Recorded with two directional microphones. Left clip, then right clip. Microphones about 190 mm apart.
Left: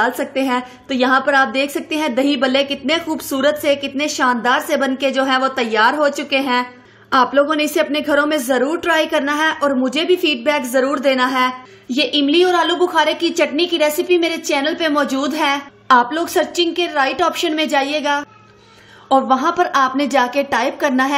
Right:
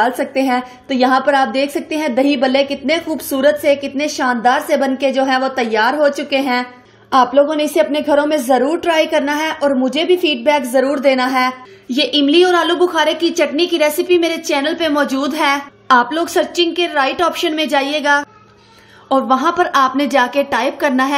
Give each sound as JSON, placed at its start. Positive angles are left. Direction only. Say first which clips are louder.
{"t": 0.0, "sound": "a woman's voice", "louder": "right 2 dB", "side_deg": -5}